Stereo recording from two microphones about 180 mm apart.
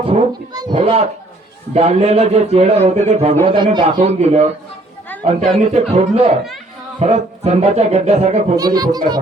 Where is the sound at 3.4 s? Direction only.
25° right (ahead or behind).